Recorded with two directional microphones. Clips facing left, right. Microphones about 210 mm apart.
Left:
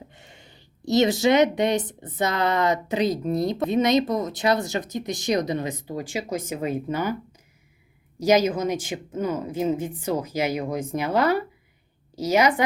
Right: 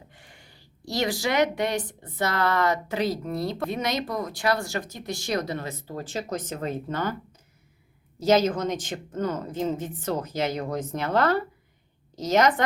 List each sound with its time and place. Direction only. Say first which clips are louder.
0.1 s speech: left 3 dB; 20° left (ahead or behind)
8.2 s speech: left 1 dB; 10° left (ahead or behind)